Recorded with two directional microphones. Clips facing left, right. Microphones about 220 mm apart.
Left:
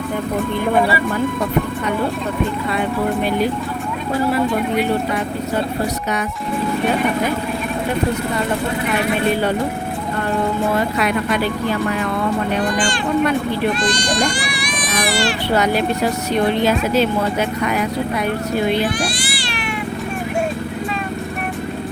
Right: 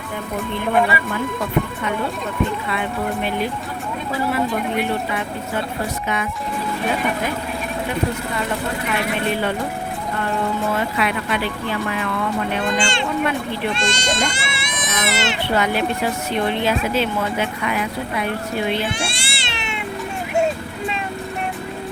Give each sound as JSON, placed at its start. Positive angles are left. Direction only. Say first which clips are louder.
{"t": 10.9, "sound": "speech", "louder": "left 4 dB", "side_deg": 40}
{"t": 12.6, "sound": "speech", "louder": "left 2 dB", "side_deg": -25}
{"t": 13.7, "sound": "children playing", "louder": "left 3 dB", "side_deg": -25}
{"t": 15.5, "sound": "speech", "louder": "left 3 dB", "side_deg": 40}
{"t": 18.9, "sound": "cat", "louder": "left 5 dB", "side_deg": -25}